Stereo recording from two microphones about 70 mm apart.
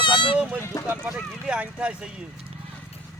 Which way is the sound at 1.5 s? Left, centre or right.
Centre.